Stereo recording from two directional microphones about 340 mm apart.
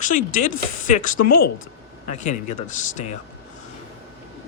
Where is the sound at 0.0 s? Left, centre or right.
Left.